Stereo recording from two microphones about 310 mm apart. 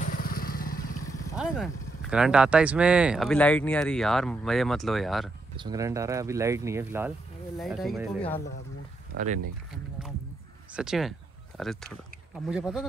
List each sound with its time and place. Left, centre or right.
0.0 s motorcycle: left
1.3 s speech: centre
5.6 s speech: centre
9.1 s speech: right
10.8 s speech: centre